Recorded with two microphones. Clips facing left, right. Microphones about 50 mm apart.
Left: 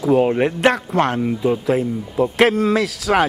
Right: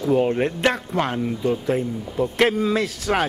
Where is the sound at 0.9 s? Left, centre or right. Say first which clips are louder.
Left 5 dB; left.